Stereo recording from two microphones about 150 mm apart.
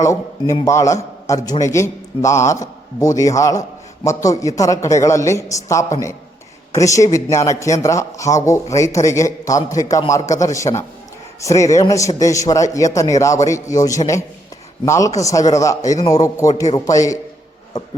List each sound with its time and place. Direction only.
0.0 s a man's voice: 20° left (ahead or behind)